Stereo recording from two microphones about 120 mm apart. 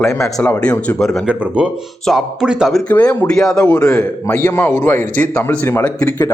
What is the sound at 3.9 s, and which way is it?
A man's voice, 20° left (ahead or behind).